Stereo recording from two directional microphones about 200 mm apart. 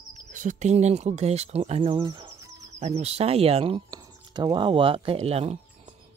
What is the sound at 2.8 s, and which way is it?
Speech, 30° right (ahead or behind).